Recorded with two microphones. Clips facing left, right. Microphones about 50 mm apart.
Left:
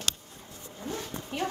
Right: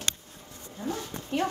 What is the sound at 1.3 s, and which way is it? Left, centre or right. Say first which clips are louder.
Speech: right 4 dB; centre.